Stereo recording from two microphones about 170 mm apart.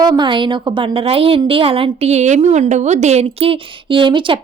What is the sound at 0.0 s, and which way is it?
A woman's voice, 25° right (ahead or behind).